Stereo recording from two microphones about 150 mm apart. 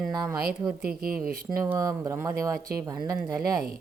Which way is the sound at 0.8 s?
80° right.